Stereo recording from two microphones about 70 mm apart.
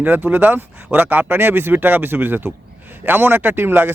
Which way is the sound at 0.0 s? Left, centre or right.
Right.